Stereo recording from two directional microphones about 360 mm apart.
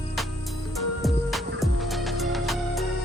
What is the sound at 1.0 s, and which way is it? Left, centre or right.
Music, centre.